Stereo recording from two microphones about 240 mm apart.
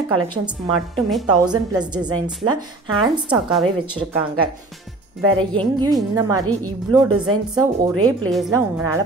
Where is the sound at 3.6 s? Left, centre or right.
Right.